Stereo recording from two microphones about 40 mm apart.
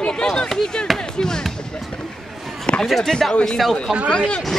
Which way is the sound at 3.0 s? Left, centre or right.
Centre.